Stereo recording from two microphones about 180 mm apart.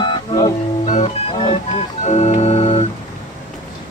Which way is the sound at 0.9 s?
40° left (ahead or behind).